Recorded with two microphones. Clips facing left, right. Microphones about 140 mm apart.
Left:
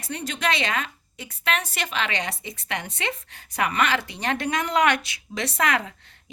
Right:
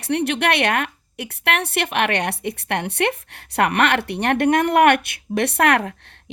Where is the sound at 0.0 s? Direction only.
65° right (ahead or behind).